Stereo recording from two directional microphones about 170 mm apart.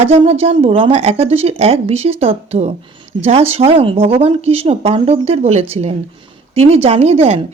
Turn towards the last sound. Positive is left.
turn(degrees=-35)  # may be behind; listen again after turning